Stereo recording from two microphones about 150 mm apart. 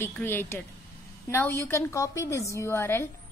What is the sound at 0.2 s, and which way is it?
A woman's voice, 15° left (ahead or behind).